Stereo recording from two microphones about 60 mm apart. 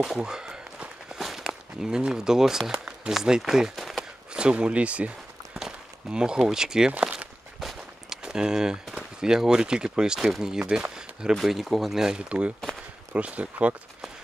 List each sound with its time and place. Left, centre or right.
0.0 s walk: centre
2.8 s speech: centre
4.3 s speech: centre
5.5 s a sound: centre
6.9 s walk: right
7.6 s a sound: centre
10.3 s speech: centre
11.3 s speech: centre; by 13.7 s right